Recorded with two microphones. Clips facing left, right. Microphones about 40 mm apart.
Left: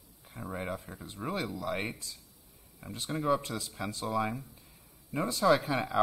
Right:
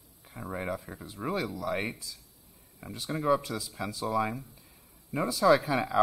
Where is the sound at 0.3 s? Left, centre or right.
Centre.